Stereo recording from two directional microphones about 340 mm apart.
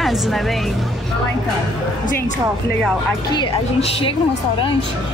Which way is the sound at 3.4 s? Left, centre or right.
Centre.